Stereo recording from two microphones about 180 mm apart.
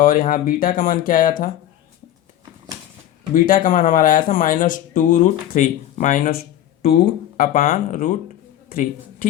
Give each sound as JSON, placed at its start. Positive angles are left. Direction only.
{"t": 0.0, "sound": "speech", "side_deg": 50}
{"t": 3.3, "sound": "speech", "side_deg": 50}